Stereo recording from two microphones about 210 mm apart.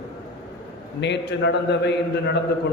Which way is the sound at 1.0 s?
55° left (ahead or behind).